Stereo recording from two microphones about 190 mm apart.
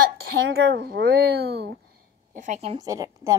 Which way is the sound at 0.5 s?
65° right (ahead or behind).